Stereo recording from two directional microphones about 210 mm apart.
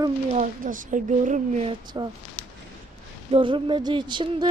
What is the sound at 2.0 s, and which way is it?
Female singing, 20° right (ahead or behind).